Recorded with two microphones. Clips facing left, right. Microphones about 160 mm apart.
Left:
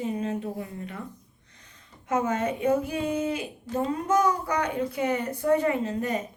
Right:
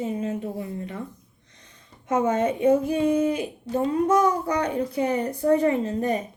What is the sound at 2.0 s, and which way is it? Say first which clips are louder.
A woman's voice: right 4 dB; 30° right (ahead or behind).